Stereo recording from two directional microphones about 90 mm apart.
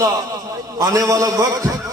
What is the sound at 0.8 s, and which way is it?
Speech, 40° right (ahead or behind).